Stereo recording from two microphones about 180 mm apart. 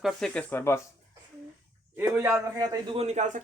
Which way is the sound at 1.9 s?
15° right (ahead or behind).